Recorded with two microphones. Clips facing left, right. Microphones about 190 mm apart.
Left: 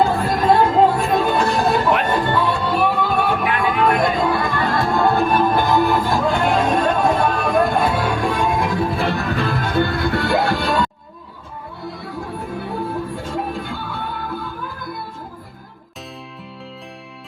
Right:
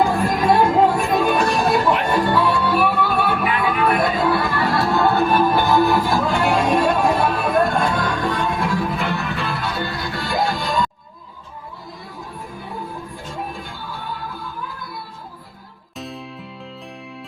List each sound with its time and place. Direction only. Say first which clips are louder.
0.0 s music: left 1 dB; 10° right (ahead or behind); by 8.9 s 15° left (ahead or behind)
9.0 s music: left 3 dB; 40° left (ahead or behind); by 10.8 s 65° left (ahead or behind)
13.3 s music: left 4 dB; 65° left (ahead or behind)